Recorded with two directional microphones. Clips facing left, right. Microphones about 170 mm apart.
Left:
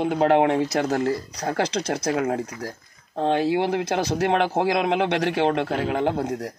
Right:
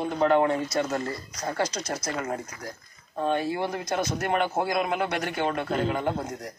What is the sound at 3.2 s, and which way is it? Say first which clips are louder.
A man's voice: left 5 dB; 80° left.